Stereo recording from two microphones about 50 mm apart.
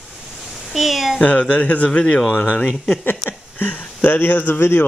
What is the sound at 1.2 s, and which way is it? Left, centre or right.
Speech, left.